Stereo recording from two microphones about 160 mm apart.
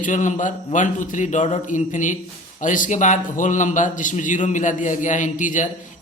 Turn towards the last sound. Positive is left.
turn(degrees=55)  # may be behind; listen again after turning